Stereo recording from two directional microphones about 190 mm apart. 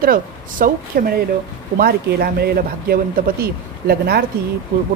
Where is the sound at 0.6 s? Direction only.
50° right (ahead or behind).